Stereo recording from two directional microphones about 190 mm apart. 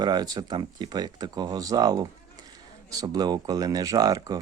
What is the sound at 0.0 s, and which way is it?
Speech, 20° right (ahead or behind).